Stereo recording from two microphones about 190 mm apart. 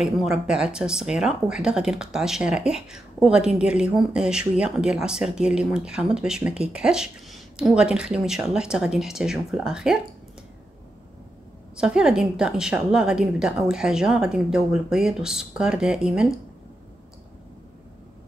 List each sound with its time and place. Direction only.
0.0 s speech: 5° right (ahead or behind)
11.7 s speech: 5° right (ahead or behind)